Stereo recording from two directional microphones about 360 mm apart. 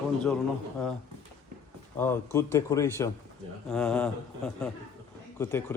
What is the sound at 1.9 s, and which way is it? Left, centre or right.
A man's voice, centre.